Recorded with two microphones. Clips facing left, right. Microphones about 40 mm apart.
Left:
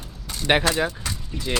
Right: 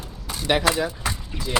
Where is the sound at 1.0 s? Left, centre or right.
Centre.